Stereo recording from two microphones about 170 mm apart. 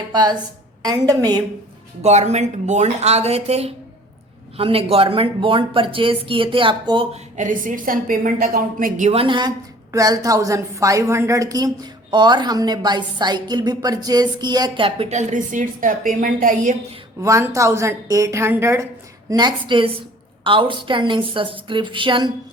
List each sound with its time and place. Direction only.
0.1 s a woman's voice: 25° right (ahead or behind)
2.0 s speech: 40° right (ahead or behind)
7.3 s a woman's voice: 50° right (ahead or behind)
9.1 s a woman's voice: 30° right (ahead or behind); by 16.7 s 55° right (ahead or behind)
17.2 s a woman's voice: 15° right (ahead or behind)